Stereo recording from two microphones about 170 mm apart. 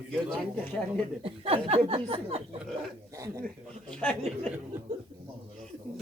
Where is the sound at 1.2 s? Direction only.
35° right (ahead or behind).